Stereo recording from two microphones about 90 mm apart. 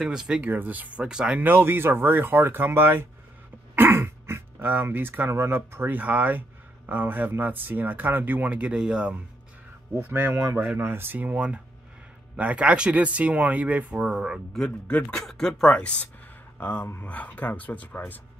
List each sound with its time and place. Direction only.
0.0 s speech: 5° right (ahead or behind)
0.4 s speech: 20° right (ahead or behind)
1.4 s speech: 25° right (ahead or behind)
9.9 s speech: 20° right (ahead or behind); by 14.6 s 5° right (ahead or behind)
14.6 s speech: 15° left (ahead or behind)
16.5 s speech: 25° left (ahead or behind)